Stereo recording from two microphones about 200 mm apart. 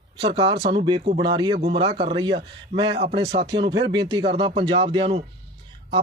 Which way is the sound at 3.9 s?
20° right (ahead or behind).